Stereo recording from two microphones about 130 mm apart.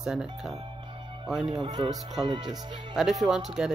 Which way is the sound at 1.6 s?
40° right (ahead or behind).